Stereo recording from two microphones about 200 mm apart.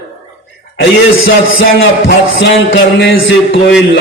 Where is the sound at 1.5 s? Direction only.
75° left (ahead or behind).